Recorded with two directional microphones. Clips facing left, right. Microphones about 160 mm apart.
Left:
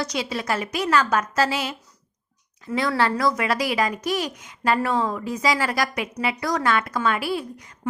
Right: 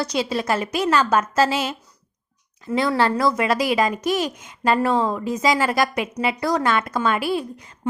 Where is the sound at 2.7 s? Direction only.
25° right (ahead or behind).